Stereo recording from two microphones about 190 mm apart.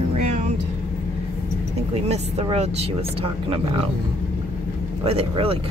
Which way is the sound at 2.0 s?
30° right (ahead or behind).